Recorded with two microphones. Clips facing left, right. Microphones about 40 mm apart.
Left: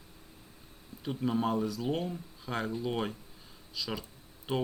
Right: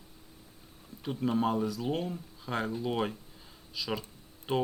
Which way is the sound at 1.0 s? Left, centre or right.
Centre.